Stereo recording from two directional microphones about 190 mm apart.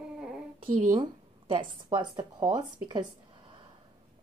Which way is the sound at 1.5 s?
25° right (ahead or behind).